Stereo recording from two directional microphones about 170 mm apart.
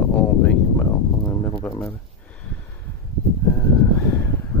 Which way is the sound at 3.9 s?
15° left (ahead or behind).